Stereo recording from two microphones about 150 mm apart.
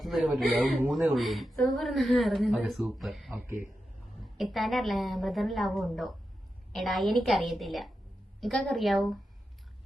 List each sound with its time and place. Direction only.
0.0 s a man's voice: centre (ahead or behind)
3.4 s a man's voice: 20° right (ahead or behind)
4.4 s speech: centre (ahead or behind)